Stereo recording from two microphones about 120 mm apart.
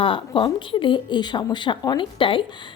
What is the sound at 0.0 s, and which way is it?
Speech, 45° left (ahead or behind).